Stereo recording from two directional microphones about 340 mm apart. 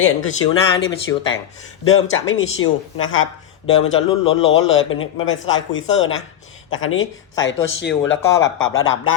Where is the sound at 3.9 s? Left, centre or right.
Centre.